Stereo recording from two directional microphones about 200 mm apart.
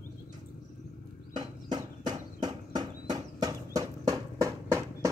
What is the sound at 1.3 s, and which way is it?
Horse, 20° right (ahead or behind).